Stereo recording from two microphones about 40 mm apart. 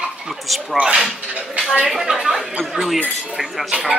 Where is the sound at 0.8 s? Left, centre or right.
Right.